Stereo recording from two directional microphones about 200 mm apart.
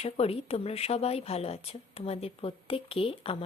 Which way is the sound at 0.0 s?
30° left (ahead or behind).